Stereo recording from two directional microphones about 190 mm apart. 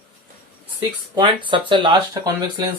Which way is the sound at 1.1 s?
25° right (ahead or behind).